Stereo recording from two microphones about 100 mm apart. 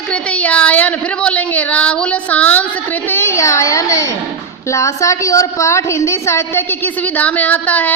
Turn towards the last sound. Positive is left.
turn(degrees=15)  # may be behind; listen again after turning